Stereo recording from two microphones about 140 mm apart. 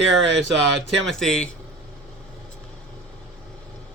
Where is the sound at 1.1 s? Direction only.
5° left (ahead or behind).